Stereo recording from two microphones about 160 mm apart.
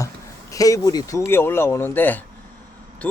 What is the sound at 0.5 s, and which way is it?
Speech, 20° left (ahead or behind).